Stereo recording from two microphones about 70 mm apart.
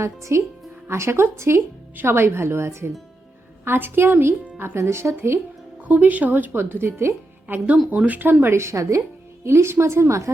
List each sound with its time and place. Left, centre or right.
0.0 s speech: right
5.9 s speech: right
7.4 s speech: right